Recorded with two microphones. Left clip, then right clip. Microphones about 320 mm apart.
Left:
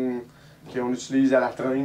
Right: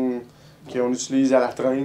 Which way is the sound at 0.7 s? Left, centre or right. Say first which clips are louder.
Right 3 dB; left.